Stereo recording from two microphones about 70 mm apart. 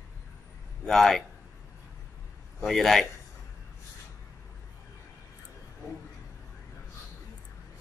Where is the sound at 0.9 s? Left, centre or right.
Centre.